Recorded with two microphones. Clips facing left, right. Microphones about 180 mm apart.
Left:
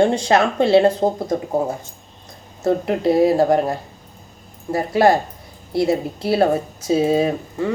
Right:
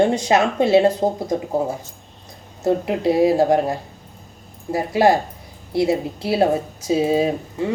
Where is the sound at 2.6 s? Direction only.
15° right (ahead or behind).